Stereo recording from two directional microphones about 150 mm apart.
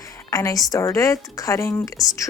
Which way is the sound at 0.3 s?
20° left (ahead or behind).